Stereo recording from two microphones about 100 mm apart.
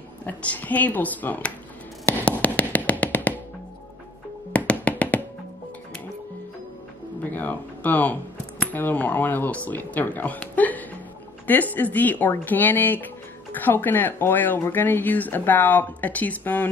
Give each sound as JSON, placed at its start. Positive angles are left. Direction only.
{"t": 0.2, "sound": "speech", "side_deg": 15}
{"t": 2.2, "sound": "music", "side_deg": 15}
{"t": 4.5, "sound": "music", "side_deg": 15}
{"t": 7.2, "sound": "a sound", "side_deg": 15}
{"t": 11.4, "sound": "speech", "side_deg": 20}